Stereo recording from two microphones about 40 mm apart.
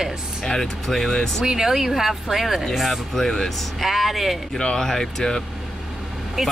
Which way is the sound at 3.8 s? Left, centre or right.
Centre.